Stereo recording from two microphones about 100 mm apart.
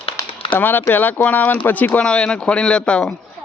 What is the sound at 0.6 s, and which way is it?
Speech, 20° left (ahead or behind).